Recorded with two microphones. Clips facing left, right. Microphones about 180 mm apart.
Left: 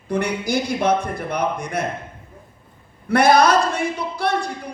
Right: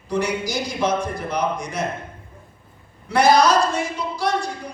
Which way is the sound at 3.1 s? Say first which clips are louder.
Left 1 dB; 55° left (ahead or behind).